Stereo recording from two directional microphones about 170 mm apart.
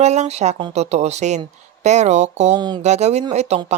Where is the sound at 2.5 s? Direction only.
25° right (ahead or behind).